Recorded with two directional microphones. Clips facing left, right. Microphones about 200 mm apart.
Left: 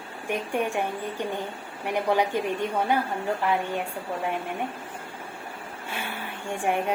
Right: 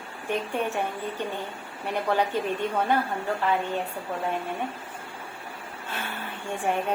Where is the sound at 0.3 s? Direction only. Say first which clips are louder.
Left 1 dB; 15° left (ahead or behind).